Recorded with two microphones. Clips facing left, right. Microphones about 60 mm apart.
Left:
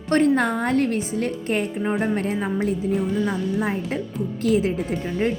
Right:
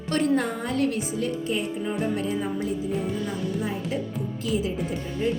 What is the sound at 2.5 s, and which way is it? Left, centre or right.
Music, left.